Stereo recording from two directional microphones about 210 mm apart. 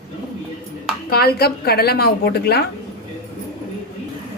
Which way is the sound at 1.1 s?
50° left (ahead or behind).